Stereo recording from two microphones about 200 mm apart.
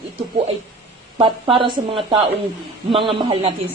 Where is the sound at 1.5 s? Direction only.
25° right (ahead or behind).